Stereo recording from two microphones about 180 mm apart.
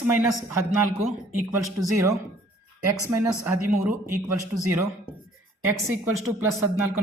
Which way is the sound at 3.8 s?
15° right (ahead or behind).